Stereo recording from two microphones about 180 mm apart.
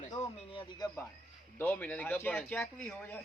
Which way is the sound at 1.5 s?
10° left (ahead or behind).